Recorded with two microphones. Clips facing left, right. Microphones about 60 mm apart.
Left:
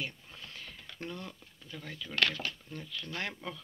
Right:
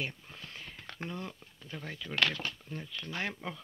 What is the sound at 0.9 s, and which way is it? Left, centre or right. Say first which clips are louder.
Speech: right 2 dB; right.